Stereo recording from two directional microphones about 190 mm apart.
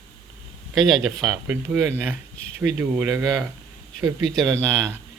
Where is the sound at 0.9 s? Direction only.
Centre (ahead or behind).